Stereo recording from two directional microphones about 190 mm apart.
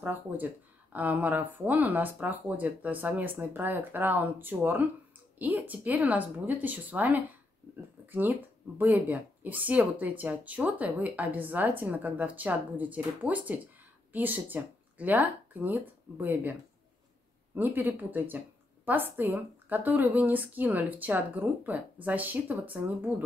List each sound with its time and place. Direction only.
0.0 s speech: 10° right (ahead or behind)
17.6 s speech: 10° right (ahead or behind)